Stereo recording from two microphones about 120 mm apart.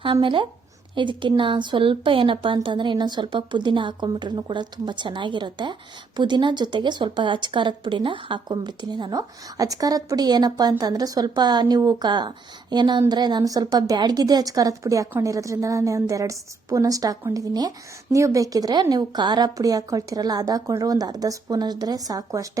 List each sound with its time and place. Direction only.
0.0 s a woman's voice: 45° right (ahead or behind)